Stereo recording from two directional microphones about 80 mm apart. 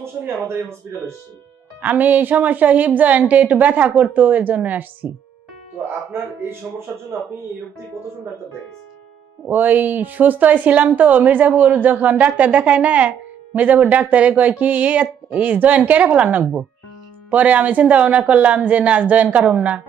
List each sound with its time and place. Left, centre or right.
0.0 s speech: right
1.8 s a woman's voice: centre
6.7 s speech: centre
9.5 s a woman's voice: right